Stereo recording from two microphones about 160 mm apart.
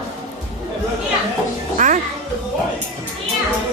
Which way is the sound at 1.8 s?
50° right (ahead or behind).